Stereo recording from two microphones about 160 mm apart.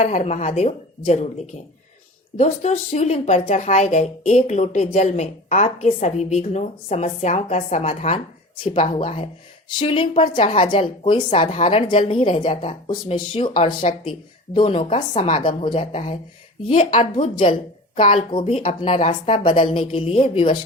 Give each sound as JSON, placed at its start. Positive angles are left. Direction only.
{"t": 0.0, "sound": "a woman's voice", "side_deg": 45}
{"t": 2.4, "sound": "a woman's voice", "side_deg": 45}